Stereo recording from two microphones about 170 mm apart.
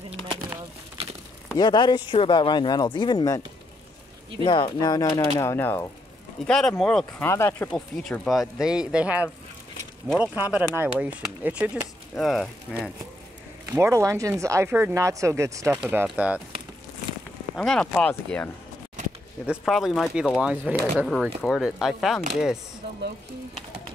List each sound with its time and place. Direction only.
0.2 s clip-clop: 30° right (ahead or behind)
1.5 s speech: 25° left (ahead or behind)
4.5 s speech: 30° left (ahead or behind)
6.4 s speech: 5° left (ahead or behind)
13.7 s speech: 15° right (ahead or behind)
17.6 s speech: 5° left (ahead or behind)
19.4 s speech: 5° right (ahead or behind)